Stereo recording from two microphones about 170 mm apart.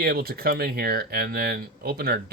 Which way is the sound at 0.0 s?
65° right (ahead or behind).